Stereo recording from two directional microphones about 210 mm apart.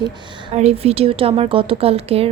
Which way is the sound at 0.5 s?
30° right (ahead or behind).